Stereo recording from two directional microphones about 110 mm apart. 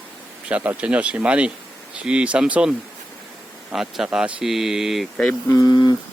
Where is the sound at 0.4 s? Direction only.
15° right (ahead or behind).